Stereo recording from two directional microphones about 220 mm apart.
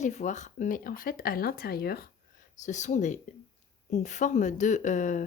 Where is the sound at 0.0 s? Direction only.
35° left (ahead or behind).